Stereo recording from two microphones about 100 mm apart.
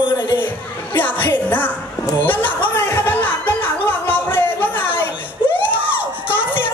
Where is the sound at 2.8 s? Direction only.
30° left (ahead or behind).